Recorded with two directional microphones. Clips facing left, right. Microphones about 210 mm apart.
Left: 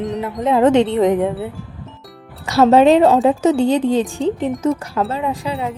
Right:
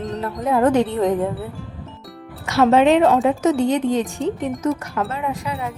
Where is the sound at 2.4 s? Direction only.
35° left (ahead or behind).